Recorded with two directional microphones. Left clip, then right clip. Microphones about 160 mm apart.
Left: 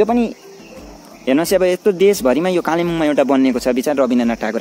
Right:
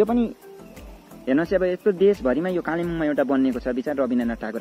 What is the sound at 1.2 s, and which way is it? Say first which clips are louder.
Speech: left 7 dB; 25° left (ahead or behind).